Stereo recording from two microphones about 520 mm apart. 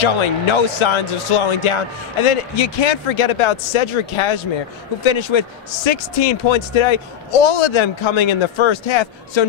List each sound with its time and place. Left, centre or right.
0.0 s a man's voice: left